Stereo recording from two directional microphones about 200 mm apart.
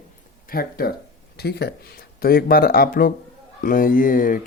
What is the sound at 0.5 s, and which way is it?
Speech, 50° left (ahead or behind).